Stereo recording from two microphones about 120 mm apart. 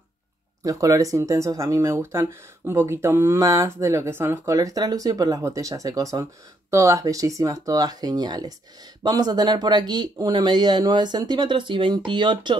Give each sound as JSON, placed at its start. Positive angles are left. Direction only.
{"t": 0.7, "sound": "speech", "side_deg": -30}